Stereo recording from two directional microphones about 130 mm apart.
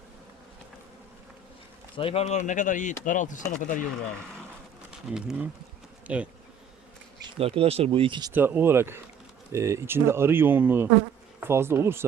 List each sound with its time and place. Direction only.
2.0 s speech: 45° left (ahead or behind)
2.5 s speech: 75° left (ahead or behind)
3.6 s speech: 90° left
5.1 s speech: 5° right (ahead or behind)
7.3 s speech: 45° right (ahead or behind)
8.3 s speech: 15° right (ahead or behind)